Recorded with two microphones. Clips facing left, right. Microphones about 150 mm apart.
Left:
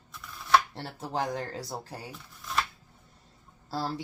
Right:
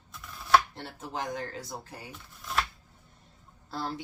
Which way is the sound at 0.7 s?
35° left (ahead or behind).